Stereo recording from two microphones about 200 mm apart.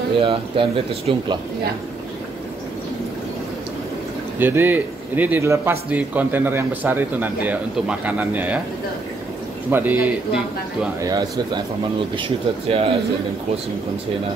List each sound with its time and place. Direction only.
0.2 s speech: 25° right (ahead or behind)
4.4 s a man's voice: 10° right (ahead or behind)
9.7 s a man's voice: 10° right (ahead or behind)
11.0 s speech: 20° right (ahead or behind)